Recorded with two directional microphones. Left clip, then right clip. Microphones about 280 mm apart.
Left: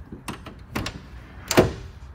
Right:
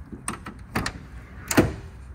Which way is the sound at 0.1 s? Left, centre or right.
Left.